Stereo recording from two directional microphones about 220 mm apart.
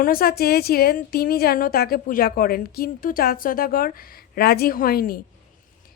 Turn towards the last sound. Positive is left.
turn(degrees=40)  # may be behind; listen again after turning